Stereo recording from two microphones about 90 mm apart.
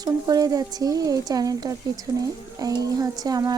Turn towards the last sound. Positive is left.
turn(degrees=-45)  # may be behind; listen again after turning